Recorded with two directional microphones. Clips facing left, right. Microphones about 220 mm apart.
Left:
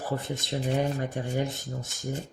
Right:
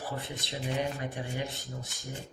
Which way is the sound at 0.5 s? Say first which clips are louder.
Left 5 dB; 45° left (ahead or behind).